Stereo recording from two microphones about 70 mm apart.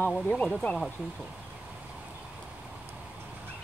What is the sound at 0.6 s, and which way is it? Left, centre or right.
Speech, centre.